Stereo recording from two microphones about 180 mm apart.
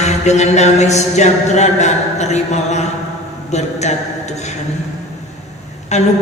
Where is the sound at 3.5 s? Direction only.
40° left (ahead or behind).